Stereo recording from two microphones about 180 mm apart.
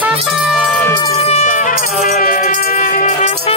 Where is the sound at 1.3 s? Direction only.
40° left (ahead or behind).